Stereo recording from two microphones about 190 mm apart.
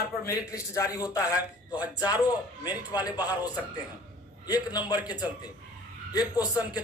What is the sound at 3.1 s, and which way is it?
Speech, 20° left (ahead or behind).